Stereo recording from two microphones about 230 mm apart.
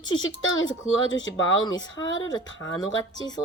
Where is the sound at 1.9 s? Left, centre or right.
Left.